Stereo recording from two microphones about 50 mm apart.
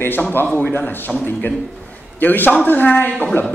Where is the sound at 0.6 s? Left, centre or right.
Left.